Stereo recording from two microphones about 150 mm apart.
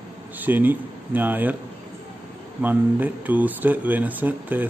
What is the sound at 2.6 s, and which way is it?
Speech, 10° right (ahead or behind).